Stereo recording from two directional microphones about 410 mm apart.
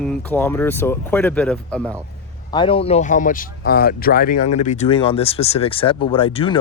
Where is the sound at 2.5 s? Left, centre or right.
Centre.